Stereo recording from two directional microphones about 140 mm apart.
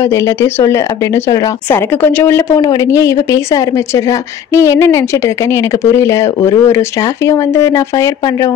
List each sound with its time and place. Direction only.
0.0 s a woman's voice: 20° left (ahead or behind)